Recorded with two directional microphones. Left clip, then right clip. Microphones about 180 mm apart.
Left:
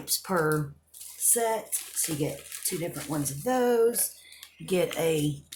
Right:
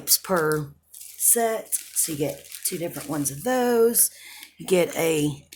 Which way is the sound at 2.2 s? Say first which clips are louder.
Right 4 dB; 45° right (ahead or behind).